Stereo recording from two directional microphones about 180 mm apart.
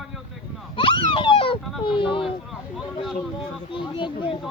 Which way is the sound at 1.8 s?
30° left (ahead or behind).